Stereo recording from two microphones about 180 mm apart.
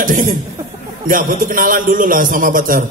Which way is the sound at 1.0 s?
50° right (ahead or behind).